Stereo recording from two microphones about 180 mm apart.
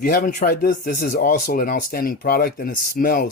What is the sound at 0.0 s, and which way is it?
Speech, 50° left (ahead or behind).